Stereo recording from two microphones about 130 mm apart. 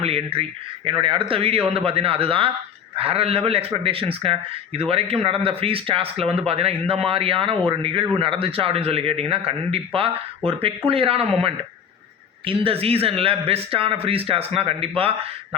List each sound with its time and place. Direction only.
0.0 s a man's voice: 50° right (ahead or behind)